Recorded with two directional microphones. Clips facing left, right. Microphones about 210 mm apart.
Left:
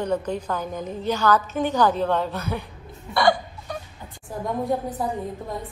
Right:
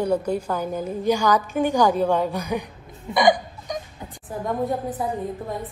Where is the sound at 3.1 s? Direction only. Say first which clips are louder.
Right 2 dB; 15° right (ahead or behind).